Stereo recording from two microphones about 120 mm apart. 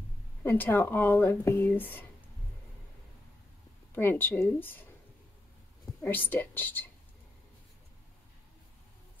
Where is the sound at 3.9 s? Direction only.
20° left (ahead or behind).